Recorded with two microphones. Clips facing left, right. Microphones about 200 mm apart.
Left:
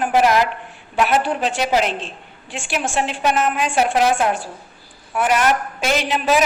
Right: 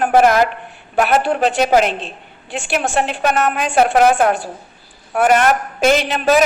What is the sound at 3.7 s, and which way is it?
Speech, 55° right (ahead or behind).